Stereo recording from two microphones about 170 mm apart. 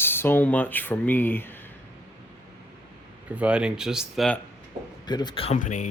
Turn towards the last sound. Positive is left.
turn(degrees=45)  # may be behind; listen again after turning